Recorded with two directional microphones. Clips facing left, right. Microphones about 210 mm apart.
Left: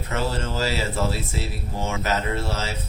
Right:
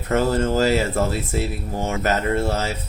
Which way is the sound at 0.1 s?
45° right (ahead or behind).